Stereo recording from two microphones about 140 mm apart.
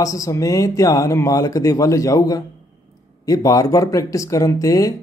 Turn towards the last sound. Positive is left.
turn(degrees=25)  # may be behind; listen again after turning